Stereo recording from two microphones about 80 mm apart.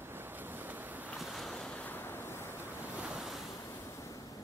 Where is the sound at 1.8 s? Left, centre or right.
Left.